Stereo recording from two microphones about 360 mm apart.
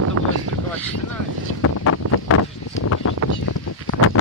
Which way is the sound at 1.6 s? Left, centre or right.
Left.